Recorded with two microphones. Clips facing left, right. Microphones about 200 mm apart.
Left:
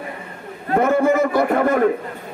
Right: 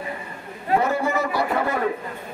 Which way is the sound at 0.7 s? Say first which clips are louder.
Left 6 dB; 50° left (ahead or behind).